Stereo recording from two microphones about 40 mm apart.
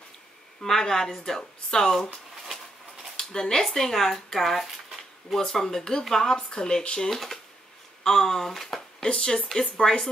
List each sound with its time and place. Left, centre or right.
0.7 s speech: centre
3.2 s speech: centre
7.1 s speech: centre
9.0 s speech: centre